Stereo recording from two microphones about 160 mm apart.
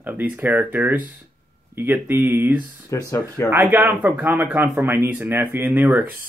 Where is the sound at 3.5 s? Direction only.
10° right (ahead or behind).